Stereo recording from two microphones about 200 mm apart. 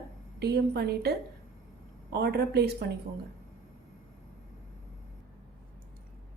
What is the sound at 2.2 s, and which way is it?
Speech, 55° right (ahead or behind).